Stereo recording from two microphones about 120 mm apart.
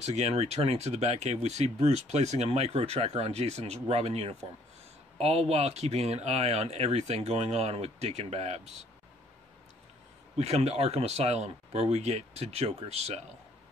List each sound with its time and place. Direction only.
0.0 s speech: 65° right (ahead or behind)
10.3 s speech: 60° right (ahead or behind)